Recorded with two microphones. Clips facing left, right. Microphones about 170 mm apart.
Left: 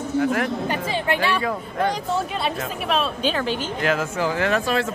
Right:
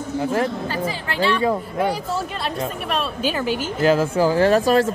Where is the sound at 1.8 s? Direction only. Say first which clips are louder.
Right 1 dB; 10° right (ahead or behind).